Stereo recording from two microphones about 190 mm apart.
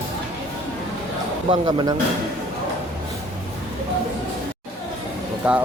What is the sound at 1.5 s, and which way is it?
Speech, 25° right (ahead or behind).